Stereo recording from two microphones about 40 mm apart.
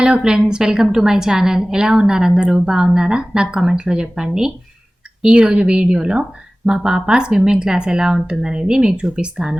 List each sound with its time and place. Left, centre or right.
0.0 s a woman's voice: right
6.7 s speech: centre